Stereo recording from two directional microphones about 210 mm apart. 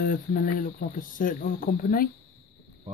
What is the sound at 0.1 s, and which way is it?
Speech, 40° left (ahead or behind).